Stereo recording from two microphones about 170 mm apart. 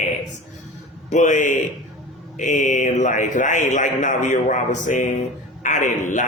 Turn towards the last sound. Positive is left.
turn(degrees=50)  # may be behind; listen again after turning